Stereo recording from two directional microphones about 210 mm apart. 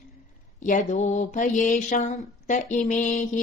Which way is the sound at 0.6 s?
35° left (ahead or behind).